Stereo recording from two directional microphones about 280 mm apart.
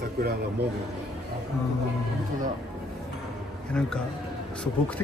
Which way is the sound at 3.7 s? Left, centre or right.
Centre.